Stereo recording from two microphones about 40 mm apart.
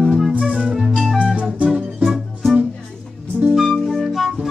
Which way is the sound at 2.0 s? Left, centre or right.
Centre.